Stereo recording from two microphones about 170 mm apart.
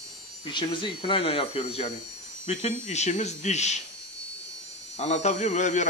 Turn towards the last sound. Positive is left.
turn(degrees=45)  # may be behind; listen again after turning